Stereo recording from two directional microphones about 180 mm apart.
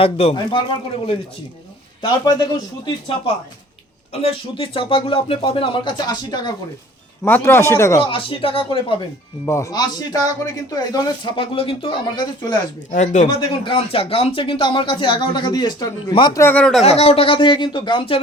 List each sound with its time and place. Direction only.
0.0 s speech: 30° left (ahead or behind)
2.0 s speech: 25° left (ahead or behind)
7.3 s speech: 10° left (ahead or behind)
8.0 s speech: 30° left (ahead or behind)
9.5 s speech: 15° left (ahead or behind)
12.9 s speech: 45° left (ahead or behind)
13.2 s speech: 30° left (ahead or behind)
16.4 s speech: 10° left (ahead or behind)
16.8 s speech: 35° left (ahead or behind)